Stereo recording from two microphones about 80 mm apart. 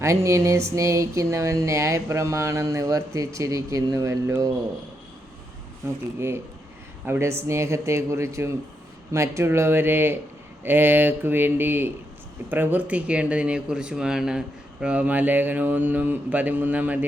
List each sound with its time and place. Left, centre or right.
0.0 s speech: right
6.1 s speech: right